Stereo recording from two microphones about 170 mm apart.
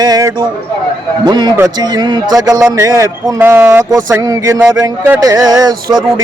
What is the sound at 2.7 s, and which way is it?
Speech, 15° right (ahead or behind).